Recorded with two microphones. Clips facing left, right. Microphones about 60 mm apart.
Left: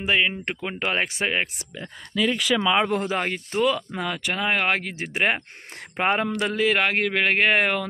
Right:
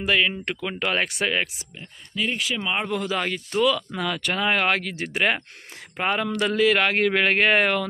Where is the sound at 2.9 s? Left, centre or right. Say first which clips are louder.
Left 2 dB; left.